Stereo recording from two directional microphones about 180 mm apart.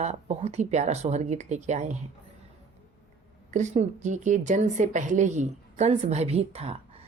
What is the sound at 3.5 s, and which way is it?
Speech, 40° right (ahead or behind).